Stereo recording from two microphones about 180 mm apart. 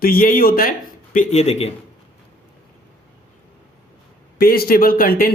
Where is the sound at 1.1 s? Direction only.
40° left (ahead or behind).